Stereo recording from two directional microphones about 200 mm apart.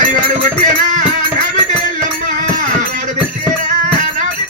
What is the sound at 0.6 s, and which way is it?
Music, 40° right (ahead or behind).